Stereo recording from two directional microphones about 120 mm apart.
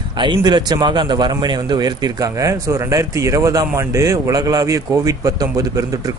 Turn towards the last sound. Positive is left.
turn(degrees=-30)  # may be behind; listen again after turning